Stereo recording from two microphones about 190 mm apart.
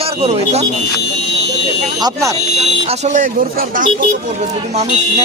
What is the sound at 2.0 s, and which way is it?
Speech, 15° right (ahead or behind).